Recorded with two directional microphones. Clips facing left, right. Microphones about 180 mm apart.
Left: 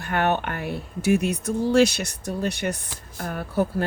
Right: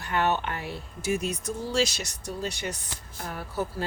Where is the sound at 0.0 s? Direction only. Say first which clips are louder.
Left 3 dB; 55° left (ahead or behind).